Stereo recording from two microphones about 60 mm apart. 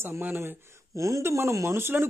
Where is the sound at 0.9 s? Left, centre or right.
Right.